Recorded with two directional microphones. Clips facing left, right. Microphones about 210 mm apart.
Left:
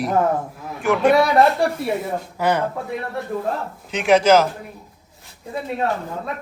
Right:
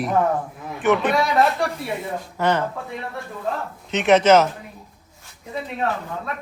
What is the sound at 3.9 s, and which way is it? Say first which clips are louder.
Speech: even; centre (ahead or behind).